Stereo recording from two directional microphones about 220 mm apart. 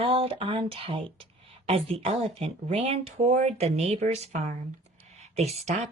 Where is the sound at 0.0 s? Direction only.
25° right (ahead or behind).